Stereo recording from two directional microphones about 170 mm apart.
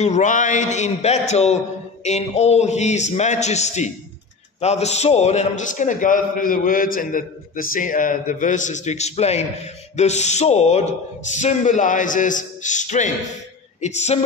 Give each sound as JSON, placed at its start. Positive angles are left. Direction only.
{"t": 0.0, "sound": "a man's voice", "side_deg": 45}